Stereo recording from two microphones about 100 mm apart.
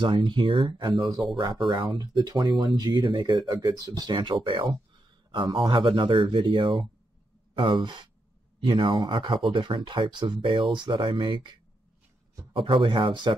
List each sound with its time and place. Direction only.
0.0 s speech: 50° right (ahead or behind)
4.1 s speech: 50° right (ahead or behind)
12.5 s speech: 55° right (ahead or behind)